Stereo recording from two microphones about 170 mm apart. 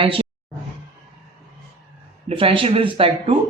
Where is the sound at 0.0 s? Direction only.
35° right (ahead or behind).